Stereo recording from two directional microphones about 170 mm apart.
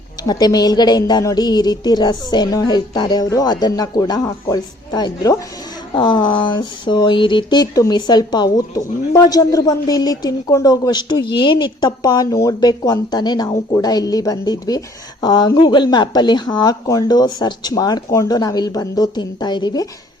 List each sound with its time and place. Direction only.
0.3 s speech: 25° left (ahead or behind)